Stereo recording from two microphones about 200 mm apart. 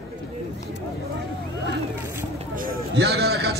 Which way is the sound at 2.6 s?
55° right (ahead or behind).